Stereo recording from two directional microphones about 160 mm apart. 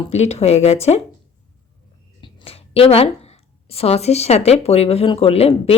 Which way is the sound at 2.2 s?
35° left (ahead or behind).